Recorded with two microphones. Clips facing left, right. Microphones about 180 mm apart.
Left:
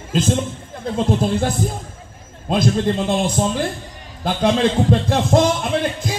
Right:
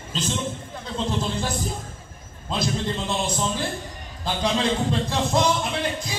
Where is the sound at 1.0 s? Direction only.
55° left (ahead or behind).